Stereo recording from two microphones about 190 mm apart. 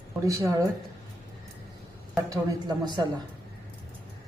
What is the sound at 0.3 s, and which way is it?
Speech, 15° right (ahead or behind).